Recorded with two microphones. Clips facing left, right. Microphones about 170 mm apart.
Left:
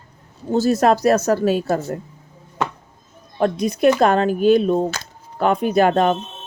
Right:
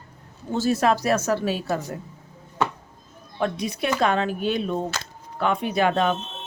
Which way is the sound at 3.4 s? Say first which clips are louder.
Left 9 dB; 40° left (ahead or behind).